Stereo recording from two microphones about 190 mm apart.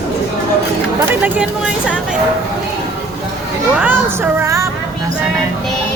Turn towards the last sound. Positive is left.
turn(degrees=-15)  # may be behind; listen again after turning